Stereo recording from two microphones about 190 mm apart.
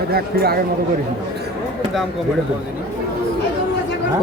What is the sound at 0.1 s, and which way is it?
Speech, 55° right (ahead or behind).